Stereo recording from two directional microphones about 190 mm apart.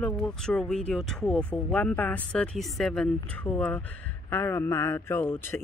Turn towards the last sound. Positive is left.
turn(degrees=10)  # may be behind; listen again after turning